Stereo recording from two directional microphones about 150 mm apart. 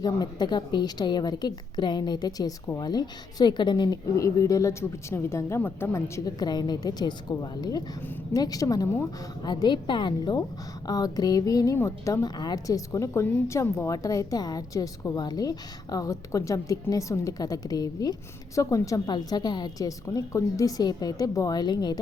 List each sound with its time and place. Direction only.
0.0 s a woman's voice: 25° left (ahead or behind)